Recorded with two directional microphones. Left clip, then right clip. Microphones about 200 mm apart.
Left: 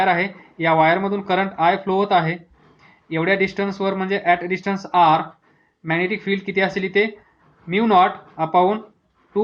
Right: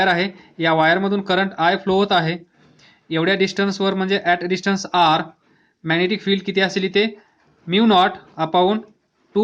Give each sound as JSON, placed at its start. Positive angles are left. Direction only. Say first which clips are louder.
{"t": 0.0, "sound": "speech", "louder": "even", "side_deg": -35}